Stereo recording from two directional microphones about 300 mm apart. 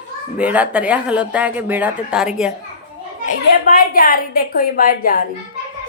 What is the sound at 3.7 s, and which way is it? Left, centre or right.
A woman's voice, left.